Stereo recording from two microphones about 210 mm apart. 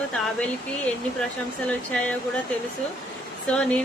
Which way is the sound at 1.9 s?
5° left (ahead or behind).